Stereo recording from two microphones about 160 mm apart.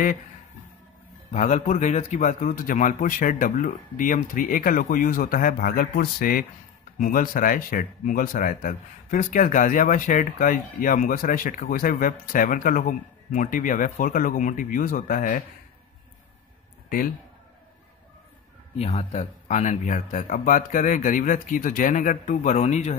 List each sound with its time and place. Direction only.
1.3 s speech: 50° left (ahead or behind)
18.8 s speech: 45° left (ahead or behind)